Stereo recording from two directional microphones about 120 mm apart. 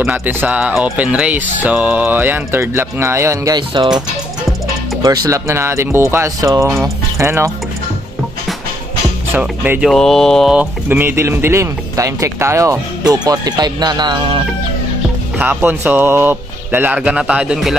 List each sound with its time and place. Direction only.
0.0 s speech: 15° right (ahead or behind)
3.5 s speech: 40° right (ahead or behind)
5.0 s speech: 30° right (ahead or behind)
9.3 s speech: 15° right (ahead or behind)
9.8 s speech: centre (ahead or behind)
10.5 s speech: 15° right (ahead or behind); by 14.4 s 40° right (ahead or behind)
15.3 s speech: 15° right (ahead or behind)